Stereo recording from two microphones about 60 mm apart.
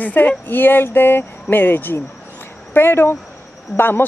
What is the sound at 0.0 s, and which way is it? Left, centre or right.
Speech, left.